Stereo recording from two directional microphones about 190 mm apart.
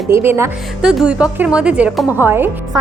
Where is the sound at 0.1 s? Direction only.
15° right (ahead or behind).